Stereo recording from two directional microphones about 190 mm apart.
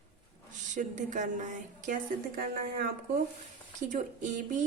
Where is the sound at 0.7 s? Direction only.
40° right (ahead or behind).